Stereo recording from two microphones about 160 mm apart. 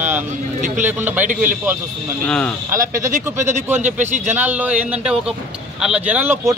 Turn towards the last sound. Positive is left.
turn(degrees=-10)  # may be behind; listen again after turning